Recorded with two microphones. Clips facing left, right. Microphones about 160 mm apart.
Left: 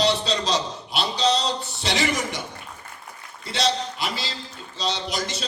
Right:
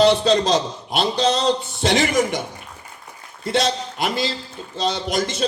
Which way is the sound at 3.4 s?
50° right (ahead or behind).